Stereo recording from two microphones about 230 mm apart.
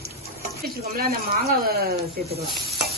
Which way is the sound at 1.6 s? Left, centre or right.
Right.